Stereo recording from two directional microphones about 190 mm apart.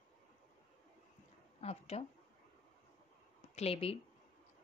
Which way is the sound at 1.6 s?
35° left (ahead or behind).